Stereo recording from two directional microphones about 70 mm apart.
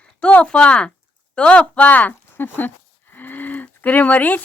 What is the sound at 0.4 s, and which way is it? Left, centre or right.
Speech, centre.